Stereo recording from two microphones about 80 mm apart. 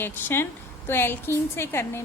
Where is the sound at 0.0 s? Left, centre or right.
Left.